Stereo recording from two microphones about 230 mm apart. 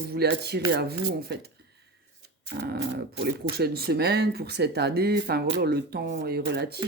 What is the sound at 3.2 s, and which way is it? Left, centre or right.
Speech, right.